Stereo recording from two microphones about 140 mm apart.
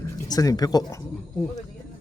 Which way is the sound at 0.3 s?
25° left (ahead or behind).